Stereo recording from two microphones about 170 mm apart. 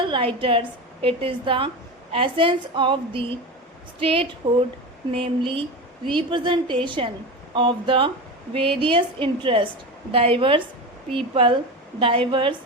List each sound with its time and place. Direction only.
0.0 s a woman's voice: 30° right (ahead or behind)